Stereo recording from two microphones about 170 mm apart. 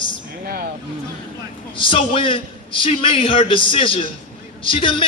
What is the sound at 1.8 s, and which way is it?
A man's voice, 30° left (ahead or behind).